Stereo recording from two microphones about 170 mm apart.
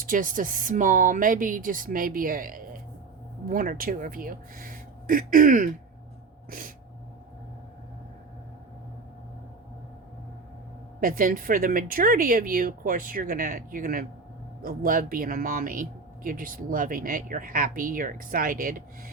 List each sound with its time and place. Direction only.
0.0 s speech: 50° right (ahead or behind)
11.0 s speech: 55° right (ahead or behind)